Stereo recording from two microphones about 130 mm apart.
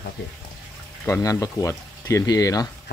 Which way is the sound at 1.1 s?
25° left (ahead or behind).